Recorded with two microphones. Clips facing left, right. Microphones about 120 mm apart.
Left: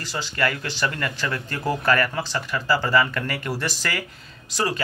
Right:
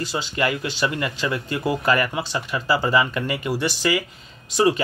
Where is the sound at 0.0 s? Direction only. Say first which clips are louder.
Right 2 dB; 15° right (ahead or behind).